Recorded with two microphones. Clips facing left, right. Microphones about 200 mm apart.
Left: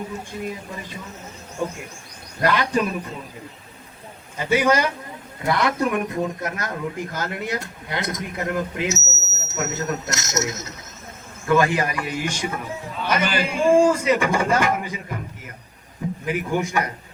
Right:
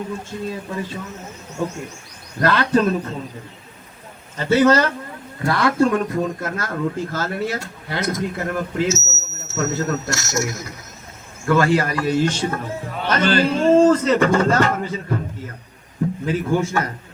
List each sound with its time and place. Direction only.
0.3 s a man's voice: 15° left (ahead or behind)
2.4 s a man's voice: 15° left (ahead or behind)
4.4 s a man's voice: 10° left (ahead or behind)